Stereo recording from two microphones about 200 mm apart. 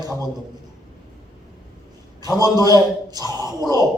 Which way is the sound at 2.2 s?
20° right (ahead or behind).